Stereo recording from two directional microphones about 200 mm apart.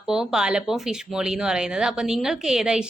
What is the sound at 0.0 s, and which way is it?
Speech, 5° right (ahead or behind).